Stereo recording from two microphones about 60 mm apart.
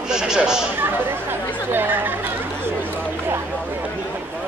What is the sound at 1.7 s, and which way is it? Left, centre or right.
Speech, right.